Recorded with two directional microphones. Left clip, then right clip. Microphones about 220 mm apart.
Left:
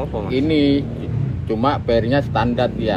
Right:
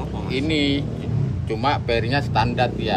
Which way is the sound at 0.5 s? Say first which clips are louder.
Left 4 dB; 15° left (ahead or behind).